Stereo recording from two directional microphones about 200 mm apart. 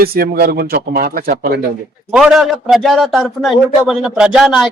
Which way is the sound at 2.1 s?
Centre (ahead or behind).